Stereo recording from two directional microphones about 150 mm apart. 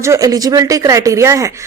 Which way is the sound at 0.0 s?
20° right (ahead or behind).